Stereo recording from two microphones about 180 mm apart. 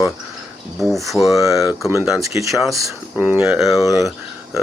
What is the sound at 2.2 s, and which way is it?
Speech, 15° right (ahead or behind).